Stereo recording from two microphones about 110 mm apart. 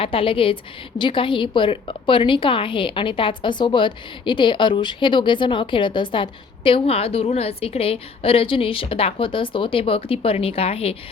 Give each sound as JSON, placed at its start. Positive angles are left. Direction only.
{"t": 0.0, "sound": "a woman's voice", "side_deg": 55}